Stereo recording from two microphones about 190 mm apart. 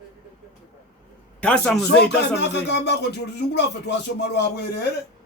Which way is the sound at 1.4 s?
5° left (ahead or behind).